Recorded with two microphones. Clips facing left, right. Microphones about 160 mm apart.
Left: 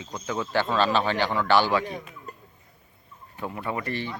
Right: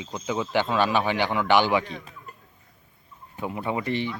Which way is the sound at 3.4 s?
15° right (ahead or behind).